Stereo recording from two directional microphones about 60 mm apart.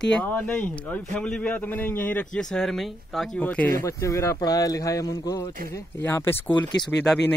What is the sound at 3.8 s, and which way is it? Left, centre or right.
Speech, left.